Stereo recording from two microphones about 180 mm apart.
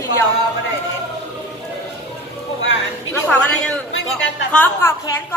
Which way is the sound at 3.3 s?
5° left (ahead or behind).